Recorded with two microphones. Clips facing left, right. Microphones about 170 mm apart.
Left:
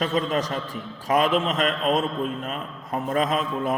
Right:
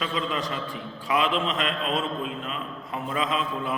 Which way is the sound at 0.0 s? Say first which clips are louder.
Left 5 dB; 45° left (ahead or behind).